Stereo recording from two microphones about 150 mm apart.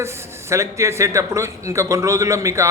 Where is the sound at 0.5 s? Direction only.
20° right (ahead or behind).